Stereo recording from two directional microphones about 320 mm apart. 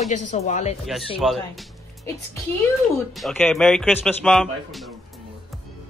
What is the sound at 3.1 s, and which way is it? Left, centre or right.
Speech, centre.